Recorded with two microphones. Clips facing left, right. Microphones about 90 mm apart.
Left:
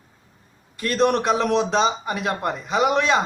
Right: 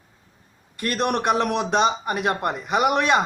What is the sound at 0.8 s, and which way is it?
A woman's voice, 55° right (ahead or behind).